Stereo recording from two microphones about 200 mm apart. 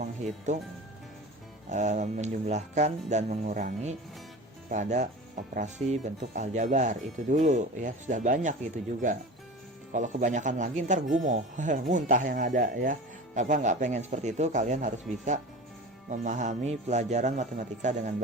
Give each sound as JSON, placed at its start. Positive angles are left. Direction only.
{"t": 0.0, "sound": "speech", "side_deg": -35}
{"t": 1.7, "sound": "speech", "side_deg": -35}
{"t": 9.9, "sound": "speech", "side_deg": -40}